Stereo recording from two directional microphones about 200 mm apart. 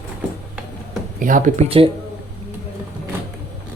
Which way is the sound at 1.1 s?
40° right (ahead or behind).